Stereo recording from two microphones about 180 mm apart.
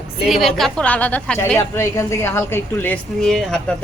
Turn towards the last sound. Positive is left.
turn(degrees=0)  # may be behind; listen again after turning